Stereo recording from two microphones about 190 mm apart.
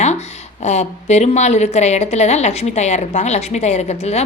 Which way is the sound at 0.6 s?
35° left (ahead or behind).